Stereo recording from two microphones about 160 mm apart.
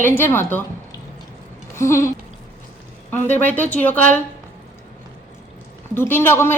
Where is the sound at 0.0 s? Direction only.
15° left (ahead or behind).